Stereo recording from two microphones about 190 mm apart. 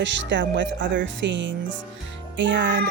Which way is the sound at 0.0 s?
70° right (ahead or behind).